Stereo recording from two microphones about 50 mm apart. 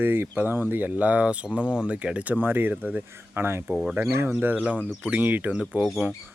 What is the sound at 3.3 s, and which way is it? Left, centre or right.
Speech, right.